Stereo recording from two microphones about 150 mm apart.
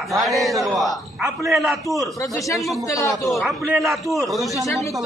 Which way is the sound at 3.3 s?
Centre (ahead or behind).